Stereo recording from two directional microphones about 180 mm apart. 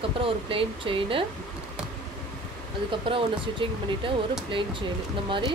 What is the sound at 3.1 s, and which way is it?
Speech, 30° right (ahead or behind).